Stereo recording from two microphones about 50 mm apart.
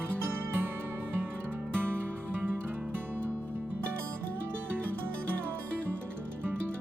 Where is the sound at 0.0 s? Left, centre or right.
Right.